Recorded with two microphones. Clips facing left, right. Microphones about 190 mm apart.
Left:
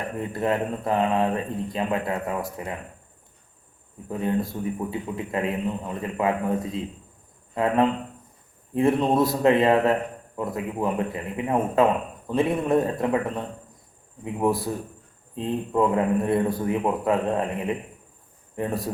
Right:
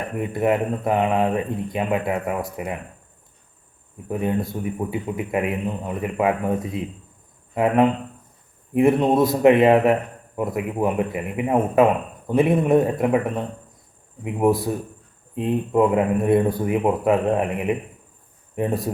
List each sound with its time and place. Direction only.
0.2 s a man's voice: 15° right (ahead or behind)
4.1 s a man's voice: 15° right (ahead or behind)